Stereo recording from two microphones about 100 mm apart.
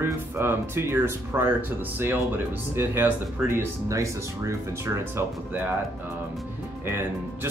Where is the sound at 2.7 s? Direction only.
20° right (ahead or behind).